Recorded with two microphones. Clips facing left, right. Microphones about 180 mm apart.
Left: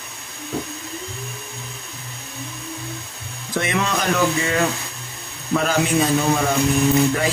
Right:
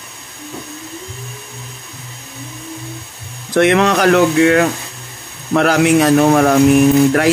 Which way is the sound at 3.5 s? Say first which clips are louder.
Right 10 dB; 70° right (ahead or behind).